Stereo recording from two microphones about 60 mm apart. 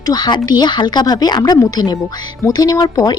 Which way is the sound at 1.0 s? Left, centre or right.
Left.